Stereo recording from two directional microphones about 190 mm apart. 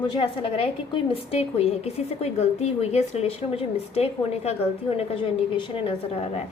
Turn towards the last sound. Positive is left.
turn(degrees=30)  # may be behind; listen again after turning